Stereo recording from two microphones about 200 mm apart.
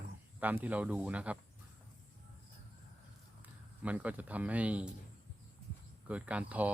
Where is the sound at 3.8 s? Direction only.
5° right (ahead or behind).